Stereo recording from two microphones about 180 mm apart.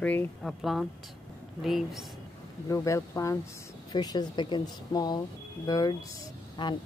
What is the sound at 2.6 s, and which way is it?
Speech, 15° left (ahead or behind).